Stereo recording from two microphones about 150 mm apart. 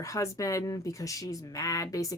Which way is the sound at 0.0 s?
20° left (ahead or behind).